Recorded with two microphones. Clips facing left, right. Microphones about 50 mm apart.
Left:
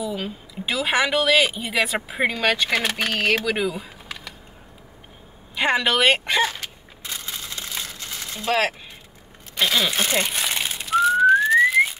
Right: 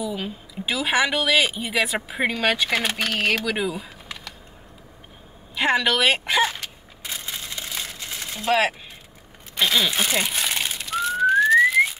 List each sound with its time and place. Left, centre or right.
0.0 s a woman's voice: centre
3.0 s speech: centre
5.6 s a woman's voice: centre
7.1 s crushing: centre
7.8 s a sound: centre
8.5 s speech: centre
9.6 s crumpling: centre
10.8 s whistling: centre